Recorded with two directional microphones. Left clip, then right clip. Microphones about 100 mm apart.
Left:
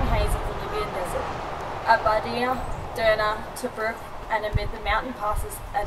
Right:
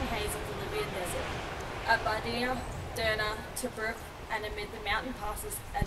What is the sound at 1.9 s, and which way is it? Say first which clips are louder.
A woman's voice: left 8 dB; 5° right (ahead or behind).